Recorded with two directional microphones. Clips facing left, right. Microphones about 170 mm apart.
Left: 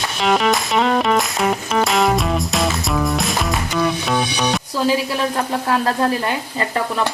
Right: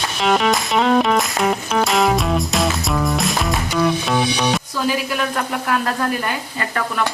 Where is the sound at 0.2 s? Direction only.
Centre (ahead or behind).